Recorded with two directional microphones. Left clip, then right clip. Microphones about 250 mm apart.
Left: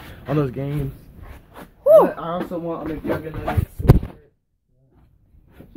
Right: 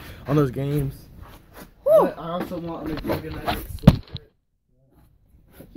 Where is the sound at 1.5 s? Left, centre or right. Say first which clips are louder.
Left 5 dB; centre.